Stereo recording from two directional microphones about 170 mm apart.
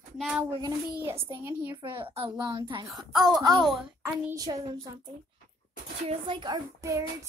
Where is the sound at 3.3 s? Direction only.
25° right (ahead or behind).